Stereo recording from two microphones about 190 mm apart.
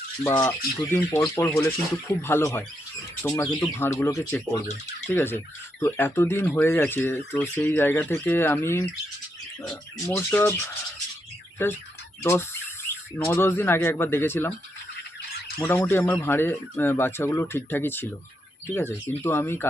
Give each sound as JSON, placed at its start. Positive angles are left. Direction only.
{"t": 0.2, "sound": "speech", "side_deg": 15}
{"t": 10.1, "sound": "speech", "side_deg": 10}
{"t": 12.2, "sound": "speech", "side_deg": 15}
{"t": 15.5, "sound": "speech", "side_deg": 10}